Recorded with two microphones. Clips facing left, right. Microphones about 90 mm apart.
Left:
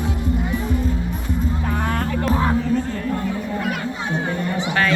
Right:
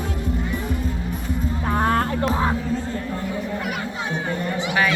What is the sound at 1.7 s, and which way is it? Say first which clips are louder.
Music: right 7 dB; 35° right (ahead or behind).